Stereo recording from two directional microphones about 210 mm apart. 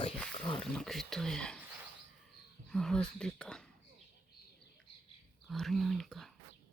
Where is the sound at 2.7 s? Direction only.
5° left (ahead or behind).